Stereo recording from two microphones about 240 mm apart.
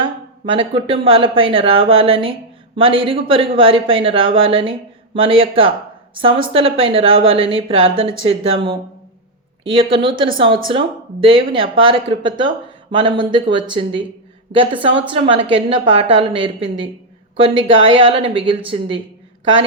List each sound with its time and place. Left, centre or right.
0.5 s speech: right
17.5 s a woman's voice: right
17.9 s speech: right